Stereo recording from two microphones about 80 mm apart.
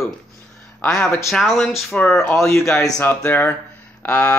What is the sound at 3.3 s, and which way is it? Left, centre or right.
Speech, left.